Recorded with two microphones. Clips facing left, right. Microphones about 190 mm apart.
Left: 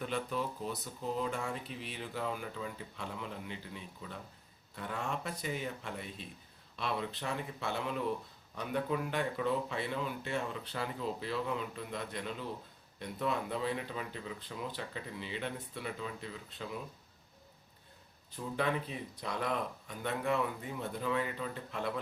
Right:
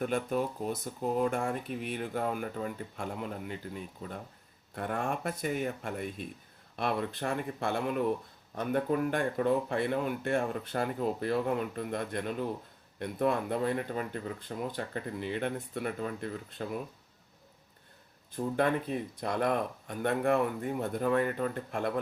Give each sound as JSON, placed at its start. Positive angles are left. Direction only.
{"t": 0.0, "sound": "speech", "side_deg": -50}
{"t": 18.3, "sound": "speech", "side_deg": -50}